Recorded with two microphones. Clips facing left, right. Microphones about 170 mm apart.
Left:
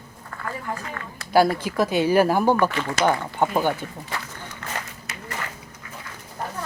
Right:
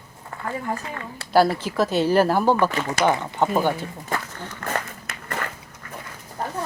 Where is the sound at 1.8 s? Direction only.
10° left (ahead or behind).